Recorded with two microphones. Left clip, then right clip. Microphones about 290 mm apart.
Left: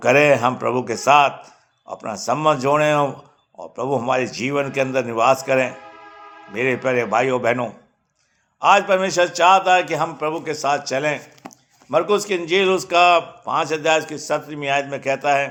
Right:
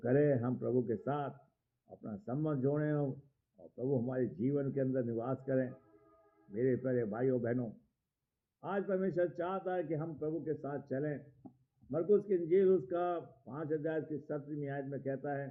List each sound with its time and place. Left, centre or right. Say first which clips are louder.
0.0 s a man's voice: left 18 dB; left
12.3 s a man's voice: left 12 dB; left